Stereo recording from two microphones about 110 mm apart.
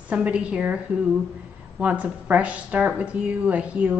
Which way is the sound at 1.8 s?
15° right (ahead or behind).